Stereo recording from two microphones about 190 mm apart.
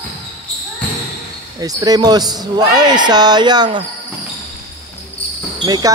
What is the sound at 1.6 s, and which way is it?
Speech, 20° right (ahead or behind).